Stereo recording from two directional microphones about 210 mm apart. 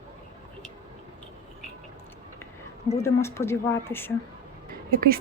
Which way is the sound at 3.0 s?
10° left (ahead or behind).